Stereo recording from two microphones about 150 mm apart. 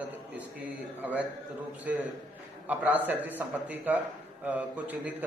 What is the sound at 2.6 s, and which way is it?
A man's voice, 10° right (ahead or behind).